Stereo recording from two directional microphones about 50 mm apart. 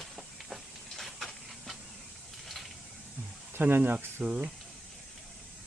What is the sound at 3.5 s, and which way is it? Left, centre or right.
Speech, right.